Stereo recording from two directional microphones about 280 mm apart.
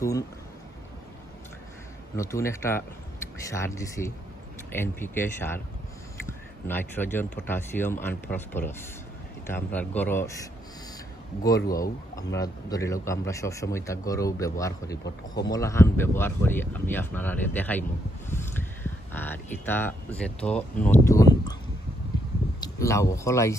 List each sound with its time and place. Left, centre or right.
2.1 s a man's voice: centre
11.7 s a man's voice: centre
15.0 s speech: left
15.5 s a man's voice: centre
18.3 s a sound: centre
19.1 s a man's voice: centre
22.6 s speech: centre